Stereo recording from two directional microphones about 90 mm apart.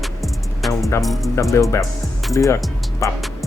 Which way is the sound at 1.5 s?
35° left (ahead or behind).